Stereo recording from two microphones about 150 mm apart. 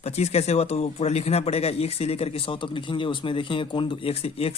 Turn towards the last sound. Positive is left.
turn(degrees=40)  # may be behind; listen again after turning